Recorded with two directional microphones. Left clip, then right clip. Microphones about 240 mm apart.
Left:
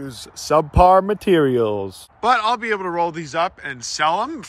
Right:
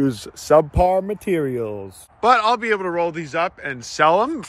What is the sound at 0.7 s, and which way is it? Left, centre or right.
A man's voice, centre.